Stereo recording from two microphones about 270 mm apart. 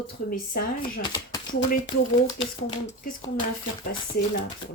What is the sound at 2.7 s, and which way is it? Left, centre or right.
Speech, left.